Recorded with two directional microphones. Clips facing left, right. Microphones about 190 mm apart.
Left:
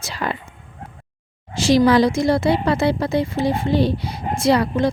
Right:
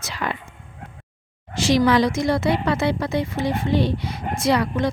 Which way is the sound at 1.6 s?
30° left (ahead or behind).